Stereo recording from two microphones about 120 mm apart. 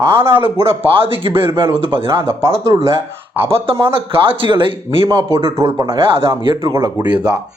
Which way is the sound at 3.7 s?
50° right (ahead or behind).